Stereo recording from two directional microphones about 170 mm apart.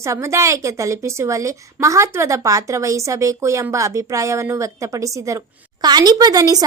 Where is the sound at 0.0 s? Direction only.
15° right (ahead or behind).